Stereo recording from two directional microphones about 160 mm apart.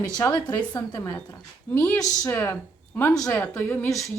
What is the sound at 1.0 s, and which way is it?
A woman's voice, 15° left (ahead or behind).